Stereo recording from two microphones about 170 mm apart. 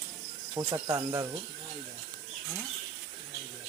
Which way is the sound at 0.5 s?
20° right (ahead or behind).